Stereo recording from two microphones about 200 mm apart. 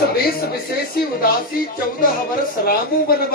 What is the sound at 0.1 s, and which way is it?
Speech, 50° left (ahead or behind).